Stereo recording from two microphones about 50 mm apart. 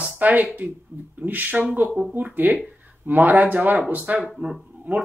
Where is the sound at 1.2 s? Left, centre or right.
Right.